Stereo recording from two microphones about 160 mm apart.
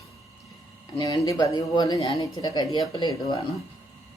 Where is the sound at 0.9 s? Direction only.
20° left (ahead or behind).